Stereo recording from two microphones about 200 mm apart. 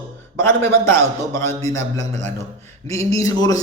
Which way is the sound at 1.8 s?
35° right (ahead or behind).